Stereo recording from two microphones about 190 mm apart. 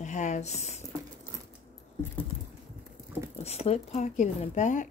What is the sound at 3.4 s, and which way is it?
Speech, 35° left (ahead or behind).